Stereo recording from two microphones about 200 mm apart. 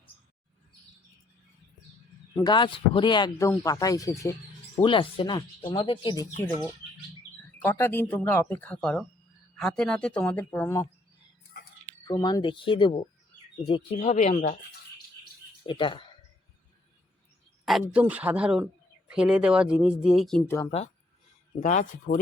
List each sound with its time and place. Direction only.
2.3 s speech: 20° left (ahead or behind)
4.8 s speech: 25° left (ahead or behind)
6.4 s speech: 10° left (ahead or behind)
12.0 s speech: 20° left (ahead or behind); by 14.5 s 40° left (ahead or behind)
15.6 s speech: 25° left (ahead or behind)
17.9 s speech: 5° right (ahead or behind)
21.6 s speech: 35° left (ahead or behind)